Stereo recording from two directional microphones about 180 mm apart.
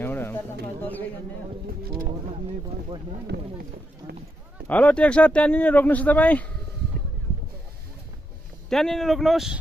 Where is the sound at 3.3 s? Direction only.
60° right (ahead or behind).